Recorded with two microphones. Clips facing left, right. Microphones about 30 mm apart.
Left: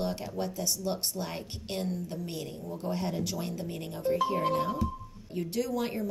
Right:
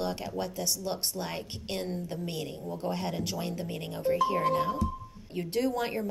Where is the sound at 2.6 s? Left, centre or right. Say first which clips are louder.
Right 2 dB; right.